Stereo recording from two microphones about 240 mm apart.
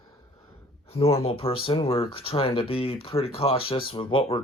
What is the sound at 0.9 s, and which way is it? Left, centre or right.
Speech, left.